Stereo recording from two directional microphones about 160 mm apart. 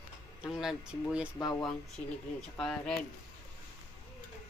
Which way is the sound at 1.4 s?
25° left (ahead or behind).